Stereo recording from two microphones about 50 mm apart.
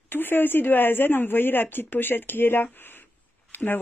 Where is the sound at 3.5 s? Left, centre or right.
Left.